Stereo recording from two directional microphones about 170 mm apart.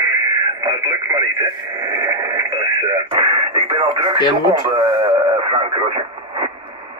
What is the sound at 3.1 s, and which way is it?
Radio, 30° right (ahead or behind).